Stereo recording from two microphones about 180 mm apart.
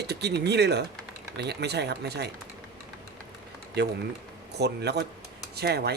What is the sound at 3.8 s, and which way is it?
Speech, 65° right (ahead or behind).